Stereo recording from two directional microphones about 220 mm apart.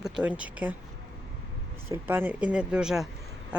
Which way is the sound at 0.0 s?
5° right (ahead or behind).